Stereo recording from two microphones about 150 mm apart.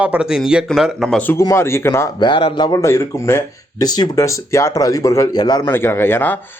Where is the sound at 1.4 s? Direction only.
20° left (ahead or behind).